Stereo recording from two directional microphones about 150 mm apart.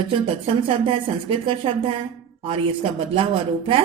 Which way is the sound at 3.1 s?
35° right (ahead or behind).